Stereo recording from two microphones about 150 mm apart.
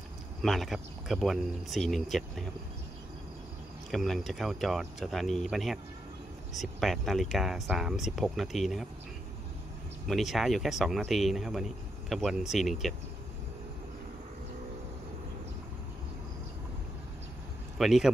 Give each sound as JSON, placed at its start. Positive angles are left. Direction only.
{"t": 0.4, "sound": "speech", "side_deg": 0}
{"t": 3.9, "sound": "speech", "side_deg": 0}
{"t": 6.8, "sound": "speech", "side_deg": 0}
{"t": 10.0, "sound": "speech", "side_deg": 0}
{"t": 17.7, "sound": "speech", "side_deg": 0}